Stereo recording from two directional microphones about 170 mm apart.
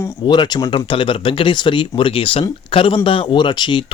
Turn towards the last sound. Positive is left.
turn(degrees=25)  # may be behind; listen again after turning